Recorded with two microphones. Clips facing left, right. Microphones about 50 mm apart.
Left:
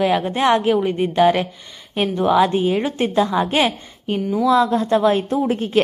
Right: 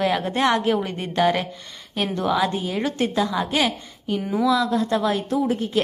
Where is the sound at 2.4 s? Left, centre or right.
Left.